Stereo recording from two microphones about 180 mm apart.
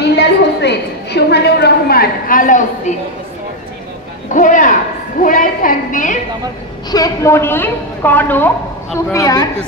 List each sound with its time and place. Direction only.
0.1 s a woman's voice: 70° left (ahead or behind); by 2.6 s 45° left (ahead or behind)
4.3 s a woman's voice: 45° left (ahead or behind)
6.9 s a woman's voice: 20° left (ahead or behind)